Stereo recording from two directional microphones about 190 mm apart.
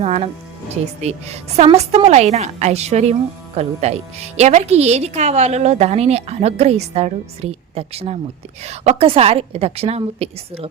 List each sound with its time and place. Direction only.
0.0 s a woman's voice: 30° right (ahead or behind)